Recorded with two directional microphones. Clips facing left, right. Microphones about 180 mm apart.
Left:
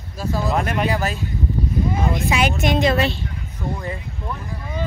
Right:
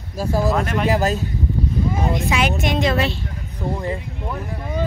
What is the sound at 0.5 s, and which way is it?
Speech, 10° left (ahead or behind).